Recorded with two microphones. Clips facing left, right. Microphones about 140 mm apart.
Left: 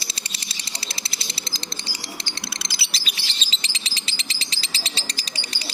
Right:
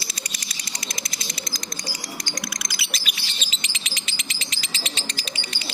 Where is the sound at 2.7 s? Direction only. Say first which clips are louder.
Right 1 dB; 30° left (ahead or behind).